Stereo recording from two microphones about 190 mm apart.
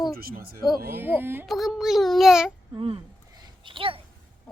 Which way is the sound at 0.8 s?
10° right (ahead or behind).